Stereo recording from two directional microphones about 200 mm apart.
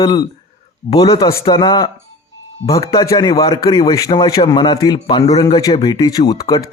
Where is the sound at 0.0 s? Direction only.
20° left (ahead or behind).